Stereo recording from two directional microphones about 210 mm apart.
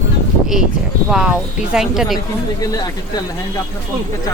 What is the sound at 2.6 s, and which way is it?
Speech, 20° left (ahead or behind).